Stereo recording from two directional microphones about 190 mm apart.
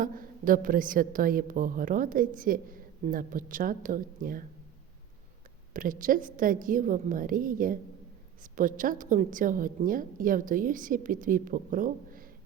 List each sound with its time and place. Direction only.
0.0 s a woman's voice: 45° right (ahead or behind)
5.7 s a woman's voice: 45° right (ahead or behind)